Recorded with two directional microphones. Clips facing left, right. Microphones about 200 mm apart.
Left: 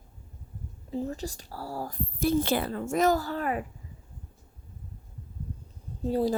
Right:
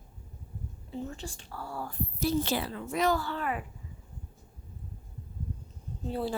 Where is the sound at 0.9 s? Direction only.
40° left (ahead or behind).